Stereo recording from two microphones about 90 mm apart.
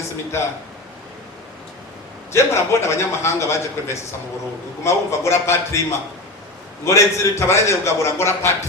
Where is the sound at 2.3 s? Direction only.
30° left (ahead or behind).